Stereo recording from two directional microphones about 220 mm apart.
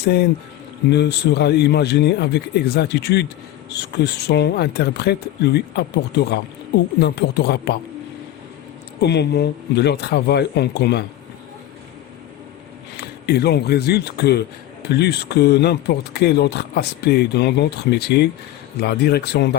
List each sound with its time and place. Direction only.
0.0 s speech: 50° left (ahead or behind)
9.0 s speech: 50° left (ahead or behind)
13.0 s speech: 45° left (ahead or behind)